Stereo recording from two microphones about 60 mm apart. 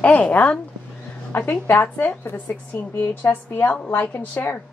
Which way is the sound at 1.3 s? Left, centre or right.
Left.